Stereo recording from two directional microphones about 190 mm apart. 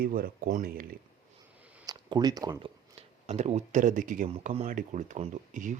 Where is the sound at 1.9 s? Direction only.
20° right (ahead or behind); by 4.2 s 45° right (ahead or behind).